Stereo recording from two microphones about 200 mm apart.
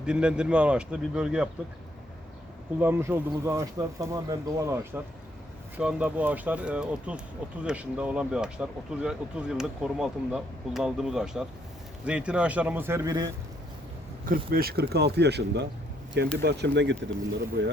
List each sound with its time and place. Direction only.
0.0 s speech: 5° right (ahead or behind)
2.7 s speech: 10° right (ahead or behind)
14.3 s speech: 50° right (ahead or behind)